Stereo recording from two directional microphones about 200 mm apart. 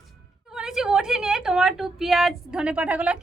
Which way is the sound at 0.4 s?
5° right (ahead or behind).